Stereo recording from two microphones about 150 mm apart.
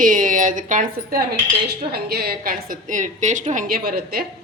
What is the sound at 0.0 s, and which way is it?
Speech, 60° right (ahead or behind).